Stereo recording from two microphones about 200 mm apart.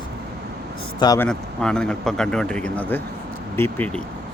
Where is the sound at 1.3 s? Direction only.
5° left (ahead or behind).